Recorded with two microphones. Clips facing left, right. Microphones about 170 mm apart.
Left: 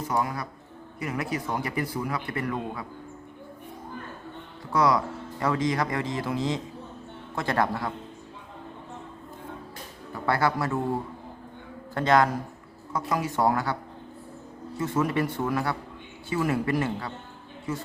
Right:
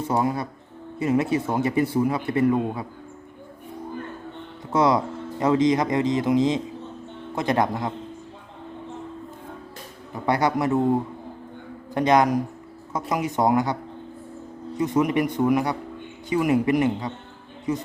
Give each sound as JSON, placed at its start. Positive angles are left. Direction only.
{"t": 0.0, "sound": "a man's voice", "side_deg": -25}
{"t": 4.7, "sound": "a man's voice", "side_deg": -25}
{"t": 10.2, "sound": "a man's voice", "side_deg": -20}
{"t": 14.8, "sound": "a man's voice", "side_deg": -15}